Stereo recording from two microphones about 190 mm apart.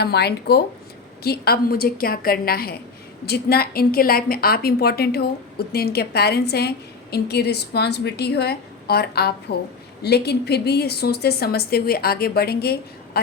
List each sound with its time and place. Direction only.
0.0 s a woman's voice: 60° left (ahead or behind)